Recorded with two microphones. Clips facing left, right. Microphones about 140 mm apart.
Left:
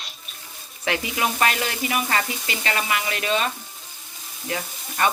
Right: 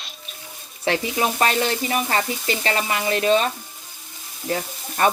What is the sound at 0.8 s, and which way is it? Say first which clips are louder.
Frying: right 3 dB; 35° right (ahead or behind).